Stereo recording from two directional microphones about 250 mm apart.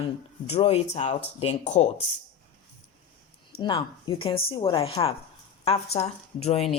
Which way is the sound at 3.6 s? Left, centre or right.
Centre.